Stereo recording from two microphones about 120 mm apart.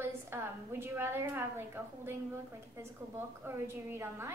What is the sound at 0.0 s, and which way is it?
A woman's voice, 20° right (ahead or behind).